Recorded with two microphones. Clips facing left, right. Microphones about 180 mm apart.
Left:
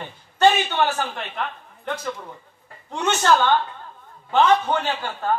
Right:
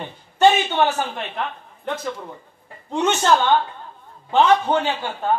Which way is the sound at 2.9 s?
20° right (ahead or behind).